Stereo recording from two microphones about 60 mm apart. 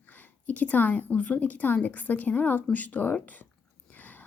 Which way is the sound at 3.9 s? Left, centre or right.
Left.